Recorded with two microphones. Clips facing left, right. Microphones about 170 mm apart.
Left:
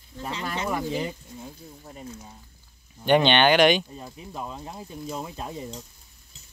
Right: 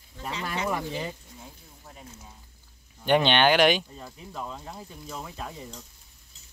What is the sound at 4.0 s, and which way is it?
Speech, 15° left (ahead or behind).